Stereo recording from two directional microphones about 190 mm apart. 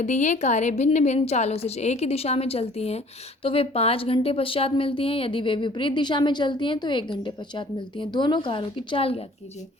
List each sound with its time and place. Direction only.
0.0 s a woman's voice: 40° left (ahead or behind)